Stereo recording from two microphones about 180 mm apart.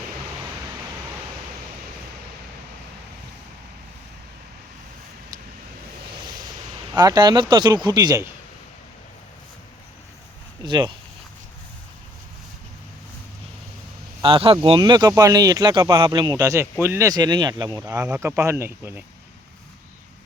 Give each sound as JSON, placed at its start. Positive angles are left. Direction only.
{"t": 6.9, "sound": "speech", "side_deg": -20}
{"t": 10.6, "sound": "speech", "side_deg": -25}
{"t": 14.2, "sound": "speech", "side_deg": -30}